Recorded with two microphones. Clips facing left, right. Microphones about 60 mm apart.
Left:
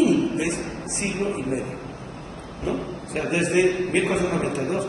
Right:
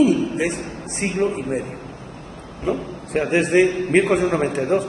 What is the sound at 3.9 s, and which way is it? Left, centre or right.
Speech, right.